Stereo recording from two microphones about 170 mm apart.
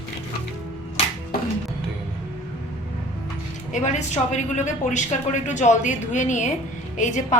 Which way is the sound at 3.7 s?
45° left (ahead or behind).